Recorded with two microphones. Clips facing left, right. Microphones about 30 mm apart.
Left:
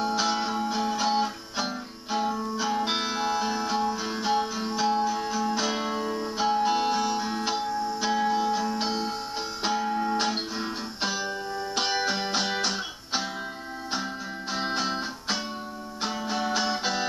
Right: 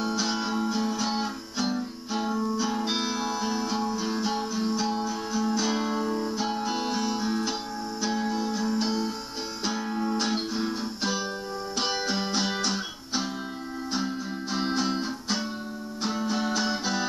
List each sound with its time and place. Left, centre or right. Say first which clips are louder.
0.2 s music: left 1 dB; centre
2.5 s music: left 1 dB; centre
11.8 s music: left 1 dB; centre
14.7 s music: right 1 dB; centre
16.0 s music: right 1 dB; centre